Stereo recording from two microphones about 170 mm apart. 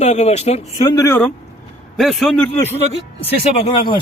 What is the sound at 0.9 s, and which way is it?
Speech, 20° left (ahead or behind).